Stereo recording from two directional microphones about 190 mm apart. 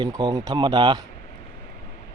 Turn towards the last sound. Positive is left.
turn(degrees=-25)  # may be behind; listen again after turning